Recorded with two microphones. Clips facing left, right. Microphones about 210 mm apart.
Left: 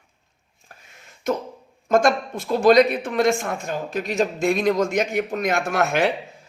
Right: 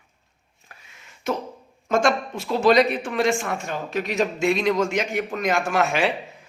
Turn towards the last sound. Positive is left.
turn(degrees=60)  # may be behind; listen again after turning